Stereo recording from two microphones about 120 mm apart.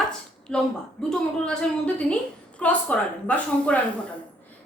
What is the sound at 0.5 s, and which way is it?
Speech, 5° left (ahead or behind).